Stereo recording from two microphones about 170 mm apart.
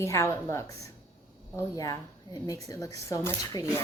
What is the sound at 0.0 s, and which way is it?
A woman's voice, 15° left (ahead or behind).